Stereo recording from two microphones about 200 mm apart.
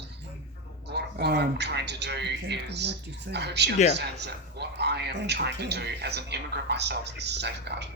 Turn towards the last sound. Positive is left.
turn(degrees=-60)  # may be behind; listen again after turning